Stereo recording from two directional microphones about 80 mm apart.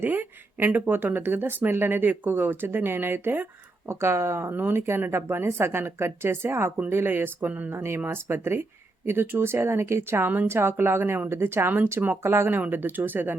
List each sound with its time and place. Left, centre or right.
0.0 s speech: right